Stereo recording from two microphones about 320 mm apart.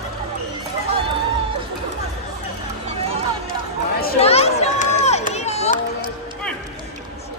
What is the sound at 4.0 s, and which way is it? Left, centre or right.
Run, left.